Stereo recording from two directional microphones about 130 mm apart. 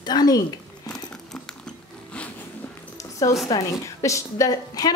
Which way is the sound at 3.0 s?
25° left (ahead or behind).